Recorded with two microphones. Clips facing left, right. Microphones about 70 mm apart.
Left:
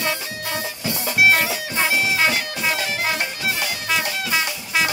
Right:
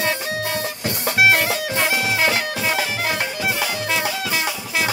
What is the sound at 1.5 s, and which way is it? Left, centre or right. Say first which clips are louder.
Music: right 1 dB; right.